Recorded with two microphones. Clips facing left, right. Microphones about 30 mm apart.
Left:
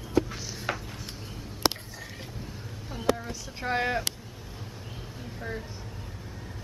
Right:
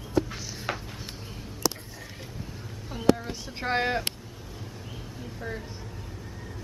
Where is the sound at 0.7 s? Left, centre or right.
Centre.